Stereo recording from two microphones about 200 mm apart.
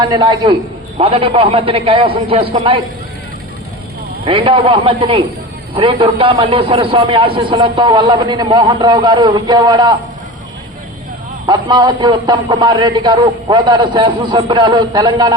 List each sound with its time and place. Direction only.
0.0 s a man's voice: 20° right (ahead or behind)
4.3 s a man's voice: 25° right (ahead or behind)
11.4 s a man's voice: 20° right (ahead or behind)